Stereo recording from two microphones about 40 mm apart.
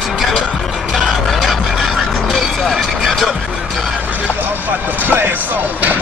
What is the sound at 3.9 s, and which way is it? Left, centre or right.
Vehicle, right.